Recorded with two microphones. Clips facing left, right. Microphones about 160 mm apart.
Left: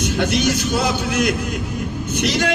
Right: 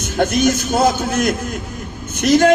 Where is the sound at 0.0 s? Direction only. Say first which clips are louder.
Right 3 dB; 45° right (ahead or behind).